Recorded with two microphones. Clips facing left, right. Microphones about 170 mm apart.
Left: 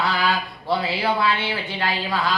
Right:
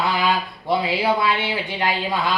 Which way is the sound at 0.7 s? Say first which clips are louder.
Right 2 dB; 15° right (ahead or behind).